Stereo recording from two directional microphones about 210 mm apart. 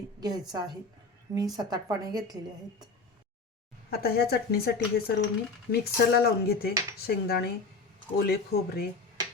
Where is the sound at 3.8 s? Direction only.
45° left (ahead or behind).